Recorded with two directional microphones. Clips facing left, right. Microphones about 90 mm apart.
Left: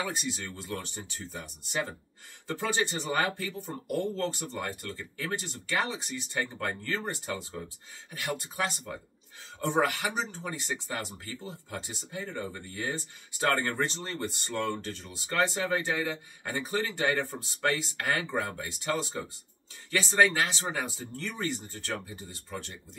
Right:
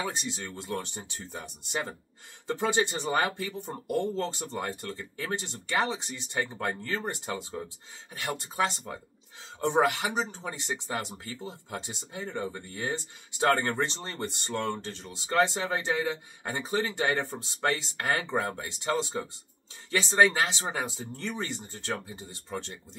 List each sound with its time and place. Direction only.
0.0 s speech: 25° right (ahead or behind)